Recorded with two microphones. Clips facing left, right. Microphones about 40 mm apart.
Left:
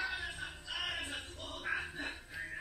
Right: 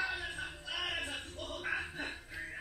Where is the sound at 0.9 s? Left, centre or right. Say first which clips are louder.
Right 2 dB; centre.